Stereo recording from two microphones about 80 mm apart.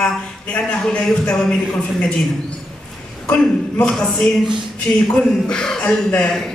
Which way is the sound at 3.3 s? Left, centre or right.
Centre.